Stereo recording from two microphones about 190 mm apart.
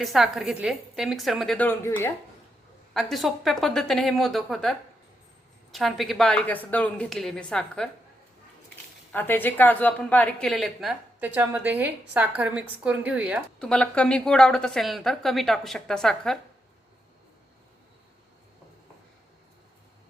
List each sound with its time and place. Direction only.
0.0 s a woman's voice: centre (ahead or behind)
2.9 s a woman's voice: centre (ahead or behind)
5.7 s a woman's voice: centre (ahead or behind)
9.1 s a woman's voice: 10° left (ahead or behind); by 13.4 s 5° right (ahead or behind)
13.6 s a woman's voice: 5° left (ahead or behind)